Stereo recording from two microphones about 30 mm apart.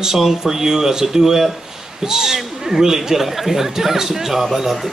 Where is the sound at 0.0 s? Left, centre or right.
Centre.